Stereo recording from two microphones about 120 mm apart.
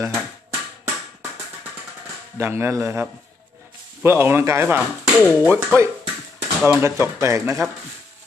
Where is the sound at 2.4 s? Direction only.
20° right (ahead or behind).